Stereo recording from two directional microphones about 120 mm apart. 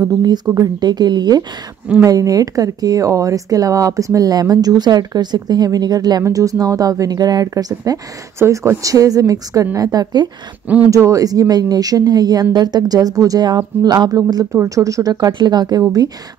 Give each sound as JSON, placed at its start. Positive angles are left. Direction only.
{"t": 0.0, "sound": "speech", "side_deg": -35}